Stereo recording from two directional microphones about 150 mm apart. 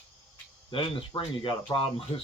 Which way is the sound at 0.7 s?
35° left (ahead or behind).